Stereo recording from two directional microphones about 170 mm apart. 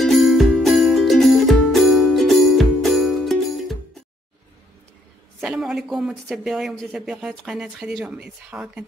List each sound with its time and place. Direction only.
0.0 s music: centre (ahead or behind)
5.4 s speech: centre (ahead or behind)